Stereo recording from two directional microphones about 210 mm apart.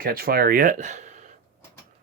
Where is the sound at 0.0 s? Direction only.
45° right (ahead or behind).